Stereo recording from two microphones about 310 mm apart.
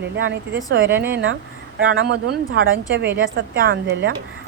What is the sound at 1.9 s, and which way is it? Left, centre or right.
A woman's voice, right.